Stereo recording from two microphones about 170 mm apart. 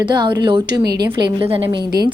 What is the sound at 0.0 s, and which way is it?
A woman's voice, 25° right (ahead or behind).